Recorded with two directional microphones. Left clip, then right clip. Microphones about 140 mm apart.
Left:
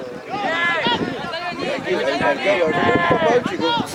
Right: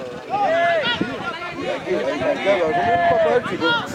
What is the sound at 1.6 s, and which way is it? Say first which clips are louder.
Speech: left 1 dB; 40° left (ahead or behind).